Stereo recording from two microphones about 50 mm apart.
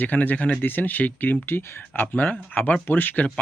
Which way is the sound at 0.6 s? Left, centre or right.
Left.